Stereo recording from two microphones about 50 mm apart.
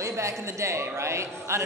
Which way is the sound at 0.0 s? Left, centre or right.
Right.